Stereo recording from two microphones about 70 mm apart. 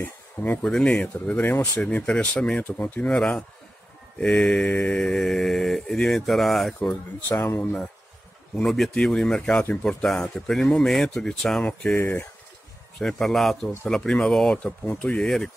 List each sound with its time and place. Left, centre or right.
0.0 s speech: left
0.7 s speech: centre
1.1 s speech: left; by 6.7 s centre
7.4 s speech: left
8.5 s speech: centre
11.9 s speech: left
13.0 s speech: centre
14.9 s speech: centre
15.2 s speech: centre